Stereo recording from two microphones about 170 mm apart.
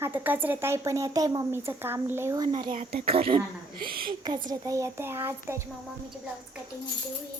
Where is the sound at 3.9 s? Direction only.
60° right (ahead or behind).